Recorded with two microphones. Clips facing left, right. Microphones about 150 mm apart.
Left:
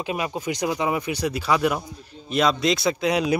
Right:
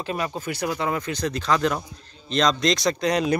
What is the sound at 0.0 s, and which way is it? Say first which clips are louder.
Speech: left 1 dB; 10° left (ahead or behind).